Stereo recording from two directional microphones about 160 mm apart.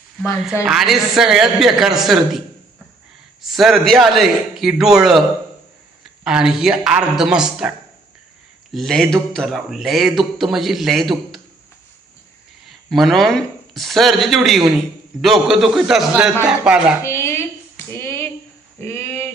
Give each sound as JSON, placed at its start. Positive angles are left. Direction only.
{"t": 0.6, "sound": "speech", "side_deg": 0}
{"t": 3.4, "sound": "speech", "side_deg": 0}
{"t": 8.7, "sound": "speech", "side_deg": 0}
{"t": 12.6, "sound": "speech", "side_deg": 0}
{"t": 17.0, "sound": "a sound", "side_deg": 15}